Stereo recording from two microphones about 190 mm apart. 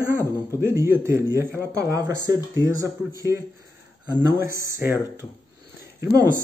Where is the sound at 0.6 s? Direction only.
15° right (ahead or behind).